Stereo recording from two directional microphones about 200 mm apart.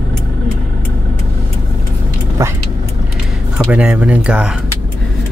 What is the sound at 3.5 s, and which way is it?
Speech, 5° right (ahead or behind).